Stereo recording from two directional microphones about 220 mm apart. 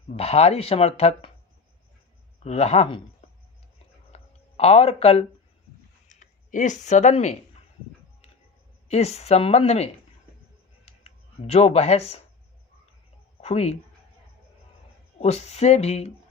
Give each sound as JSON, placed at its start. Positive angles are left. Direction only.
{"t": 0.1, "sound": "speech", "side_deg": 30}
{"t": 2.4, "sound": "speech", "side_deg": 30}
{"t": 4.1, "sound": "a sound", "side_deg": 30}
{"t": 6.1, "sound": "speech", "side_deg": 35}
{"t": 8.9, "sound": "speech", "side_deg": 30}
{"t": 10.8, "sound": "a sound", "side_deg": 25}
{"t": 13.4, "sound": "speech", "side_deg": 30}
{"t": 15.2, "sound": "speech", "side_deg": 30}